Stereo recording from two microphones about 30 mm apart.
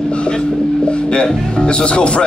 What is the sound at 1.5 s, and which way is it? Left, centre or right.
Speech, left.